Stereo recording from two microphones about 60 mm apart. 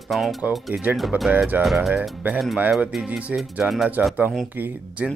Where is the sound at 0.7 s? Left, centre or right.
Right.